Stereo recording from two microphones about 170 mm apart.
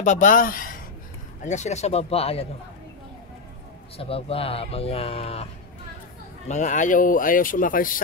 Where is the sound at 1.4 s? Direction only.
45° left (ahead or behind).